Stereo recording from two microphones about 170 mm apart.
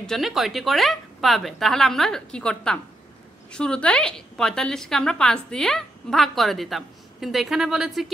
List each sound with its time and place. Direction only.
0.0 s a woman's voice: centre (ahead or behind)